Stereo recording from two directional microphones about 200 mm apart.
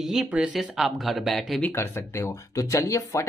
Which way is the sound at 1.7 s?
10° left (ahead or behind).